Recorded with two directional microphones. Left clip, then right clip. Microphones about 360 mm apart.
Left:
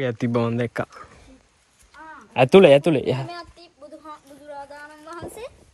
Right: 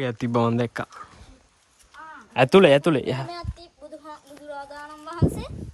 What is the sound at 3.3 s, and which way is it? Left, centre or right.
Speech, right.